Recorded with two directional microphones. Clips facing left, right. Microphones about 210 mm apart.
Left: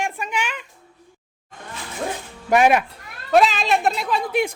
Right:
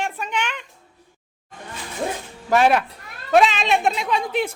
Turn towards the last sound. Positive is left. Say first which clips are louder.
# left 1 dB
turn(degrees=10)  # may be behind; listen again after turning